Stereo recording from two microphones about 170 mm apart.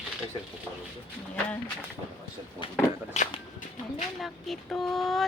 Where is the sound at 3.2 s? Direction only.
40° left (ahead or behind).